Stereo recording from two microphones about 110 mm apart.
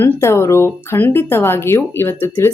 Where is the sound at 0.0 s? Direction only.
25° left (ahead or behind).